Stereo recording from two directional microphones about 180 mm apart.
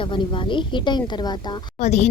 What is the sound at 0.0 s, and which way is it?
A woman's voice, 25° left (ahead or behind).